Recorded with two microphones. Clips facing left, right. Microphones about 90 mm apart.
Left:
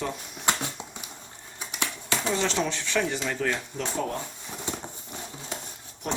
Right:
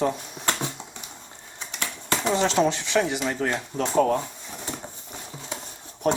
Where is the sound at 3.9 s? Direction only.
55° right (ahead or behind).